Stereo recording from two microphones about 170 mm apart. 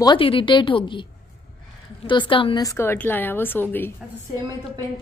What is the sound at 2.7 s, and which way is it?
A woman's voice, 10° left (ahead or behind).